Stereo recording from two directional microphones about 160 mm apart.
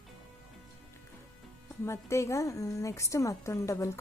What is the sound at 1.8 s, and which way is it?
A woman's voice, 20° left (ahead or behind).